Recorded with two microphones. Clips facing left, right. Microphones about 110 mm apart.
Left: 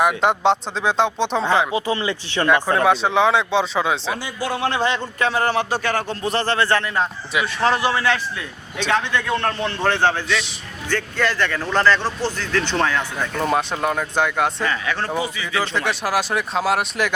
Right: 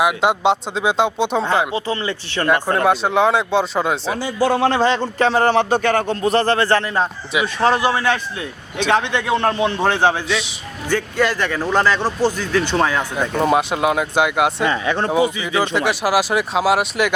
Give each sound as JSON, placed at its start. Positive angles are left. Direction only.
{"t": 0.0, "sound": "speech", "side_deg": -5}
{"t": 1.7, "sound": "speech", "side_deg": 15}
{"t": 2.7, "sound": "speech", "side_deg": 0}
{"t": 4.2, "sound": "a man's voice", "side_deg": -30}
{"t": 5.8, "sound": "speech", "side_deg": -50}
{"t": 6.2, "sound": "a man's voice", "side_deg": -40}
{"t": 7.4, "sound": "speech", "side_deg": -20}
{"t": 13.5, "sound": "speech", "side_deg": -5}
{"t": 14.7, "sound": "speech", "side_deg": -25}
{"t": 15.8, "sound": "speech", "side_deg": -5}